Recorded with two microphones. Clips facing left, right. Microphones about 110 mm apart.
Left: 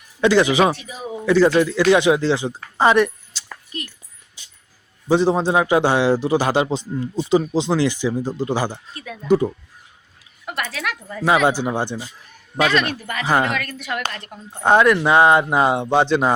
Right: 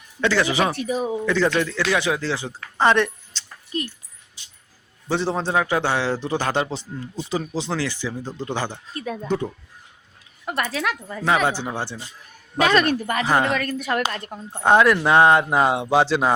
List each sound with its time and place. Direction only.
0.2 s a man's voice: 15° left (ahead or behind)
0.9 s a woman's voice: 40° right (ahead or behind)
1.2 s a man's voice: 10° left (ahead or behind)
5.0 s a man's voice: 15° left (ahead or behind)
10.4 s speech: 35° right (ahead or behind)
11.2 s a man's voice: 15° left (ahead or behind)
12.6 s a woman's voice: 40° right (ahead or behind)
13.2 s speech: centre (ahead or behind)
13.6 s a woman's voice: 35° right (ahead or behind)
14.6 s speech: centre (ahead or behind)